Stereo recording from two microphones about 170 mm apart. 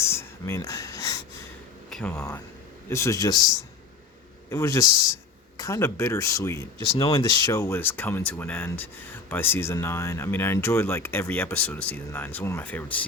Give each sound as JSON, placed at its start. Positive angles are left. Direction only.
{"t": 0.0, "sound": "a sound", "side_deg": 15}
{"t": 1.9, "sound": "speech", "side_deg": 5}
{"t": 2.9, "sound": "a man's voice", "side_deg": 15}
{"t": 4.4, "sound": "speech", "side_deg": 15}